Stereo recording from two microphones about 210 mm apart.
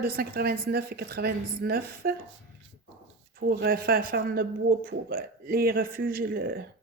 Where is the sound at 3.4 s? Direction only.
45° right (ahead or behind).